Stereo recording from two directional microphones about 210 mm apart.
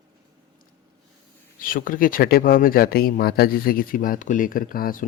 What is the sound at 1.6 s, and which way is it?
Speech, 40° left (ahead or behind).